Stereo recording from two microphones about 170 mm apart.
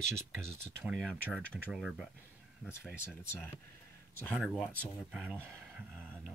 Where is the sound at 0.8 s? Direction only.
5° right (ahead or behind).